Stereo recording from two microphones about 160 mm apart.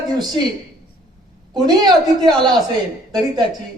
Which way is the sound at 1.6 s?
25° right (ahead or behind).